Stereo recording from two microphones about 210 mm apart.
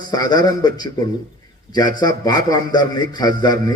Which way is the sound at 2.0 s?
20° left (ahead or behind).